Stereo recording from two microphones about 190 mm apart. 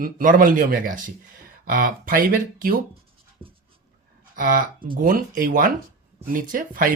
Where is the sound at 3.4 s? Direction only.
30° right (ahead or behind).